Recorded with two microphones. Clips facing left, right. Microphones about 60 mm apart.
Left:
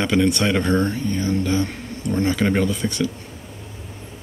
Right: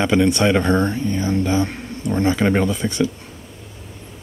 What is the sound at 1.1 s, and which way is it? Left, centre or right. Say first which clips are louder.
Speech: right 2 dB; right.